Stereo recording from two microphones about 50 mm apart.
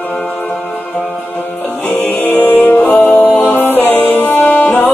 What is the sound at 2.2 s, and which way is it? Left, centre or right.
Music, left.